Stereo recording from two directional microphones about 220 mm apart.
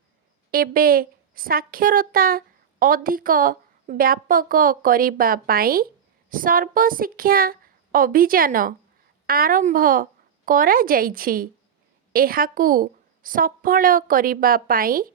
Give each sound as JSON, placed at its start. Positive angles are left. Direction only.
{"t": 0.5, "sound": "a woman's voice", "side_deg": -40}